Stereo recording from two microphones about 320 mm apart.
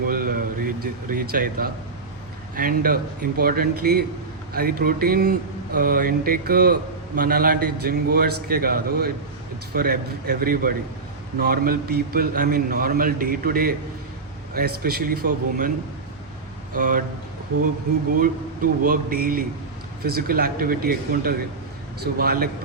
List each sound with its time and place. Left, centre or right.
0.1 s a man's voice: right
16.7 s a man's voice: right
18.2 s a man's voice: right